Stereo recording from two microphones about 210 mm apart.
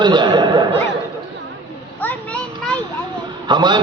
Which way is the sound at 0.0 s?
20° right (ahead or behind).